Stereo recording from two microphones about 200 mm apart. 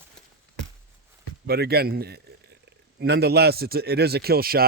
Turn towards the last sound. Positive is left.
turn(degrees=-50)  # may be behind; listen again after turning